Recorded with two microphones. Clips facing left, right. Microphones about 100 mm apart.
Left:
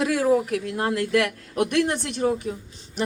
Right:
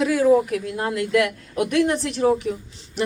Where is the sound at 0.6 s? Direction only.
55° left (ahead or behind).